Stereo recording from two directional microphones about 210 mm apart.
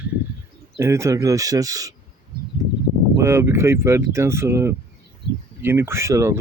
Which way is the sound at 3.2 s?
10° right (ahead or behind).